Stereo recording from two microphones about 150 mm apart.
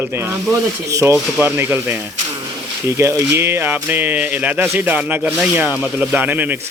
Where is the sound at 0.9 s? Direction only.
20° right (ahead or behind).